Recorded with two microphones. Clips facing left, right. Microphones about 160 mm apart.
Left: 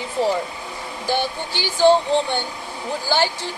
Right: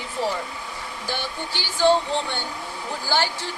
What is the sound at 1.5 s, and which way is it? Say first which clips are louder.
Speech: left 4 dB; 15° left (ahead or behind).